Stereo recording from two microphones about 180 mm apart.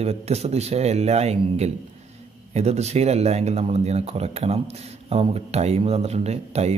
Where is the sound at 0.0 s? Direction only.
35° right (ahead or behind).